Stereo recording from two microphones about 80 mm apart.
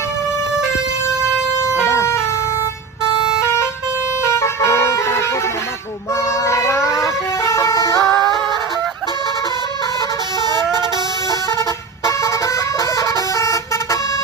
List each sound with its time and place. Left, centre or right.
1.8 s vehicle: left
4.3 s vehicle: left
6.4 s vehicle: left
10.4 s vehicle horn: right
12.0 s vehicle: left